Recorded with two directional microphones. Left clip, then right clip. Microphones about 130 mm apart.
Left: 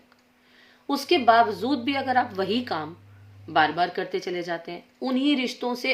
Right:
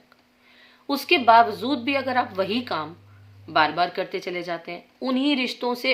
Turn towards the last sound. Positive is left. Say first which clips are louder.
# right 2 dB
turn(degrees=-20)  # may be behind; listen again after turning